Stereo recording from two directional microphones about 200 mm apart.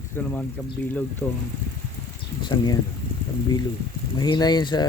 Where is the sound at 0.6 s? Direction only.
5° left (ahead or behind).